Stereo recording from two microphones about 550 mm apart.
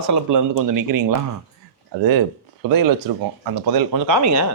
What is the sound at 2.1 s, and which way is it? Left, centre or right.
Speech, right.